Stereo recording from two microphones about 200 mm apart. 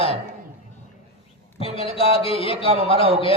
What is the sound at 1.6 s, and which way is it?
Speech, 30° left (ahead or behind).